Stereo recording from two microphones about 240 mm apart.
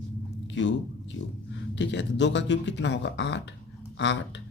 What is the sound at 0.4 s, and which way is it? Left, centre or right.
Chewing, left.